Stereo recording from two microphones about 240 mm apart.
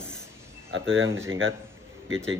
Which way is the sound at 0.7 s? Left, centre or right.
Right.